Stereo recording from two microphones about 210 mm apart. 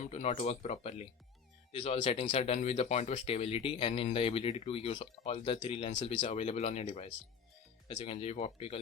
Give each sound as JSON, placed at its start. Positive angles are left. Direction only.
{"t": 0.0, "sound": "speech", "side_deg": 30}